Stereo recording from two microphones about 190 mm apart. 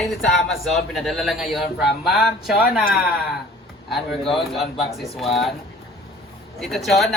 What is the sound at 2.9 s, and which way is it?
A man's voice, centre (ahead or behind).